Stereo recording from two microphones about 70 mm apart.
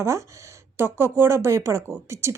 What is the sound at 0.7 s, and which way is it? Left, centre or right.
Speech, right.